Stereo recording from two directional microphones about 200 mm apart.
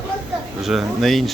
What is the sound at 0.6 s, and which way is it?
Speech, centre (ahead or behind).